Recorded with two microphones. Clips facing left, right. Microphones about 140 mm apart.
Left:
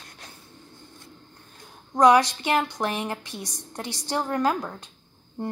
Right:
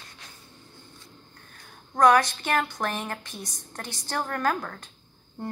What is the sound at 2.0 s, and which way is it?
A woman's voice, 15° left (ahead or behind).